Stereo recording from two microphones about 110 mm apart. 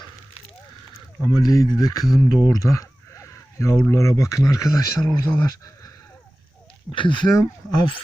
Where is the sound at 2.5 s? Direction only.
30° left (ahead or behind).